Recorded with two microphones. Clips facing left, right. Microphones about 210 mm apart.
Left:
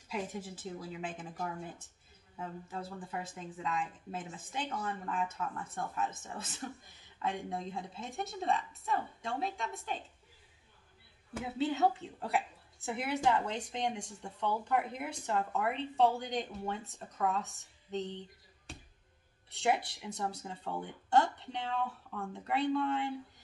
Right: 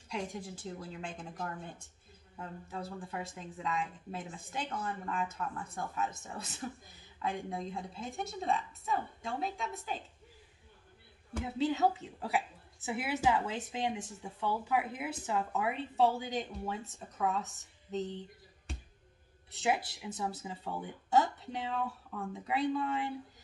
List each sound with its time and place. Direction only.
0.1 s speech: 5° left (ahead or behind)
11.3 s speech: centre (ahead or behind)